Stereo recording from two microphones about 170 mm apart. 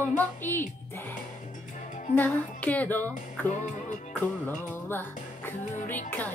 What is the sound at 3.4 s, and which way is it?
Music, 45° left (ahead or behind).